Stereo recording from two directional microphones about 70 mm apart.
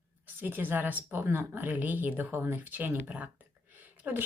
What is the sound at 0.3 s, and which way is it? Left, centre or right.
Speech, right.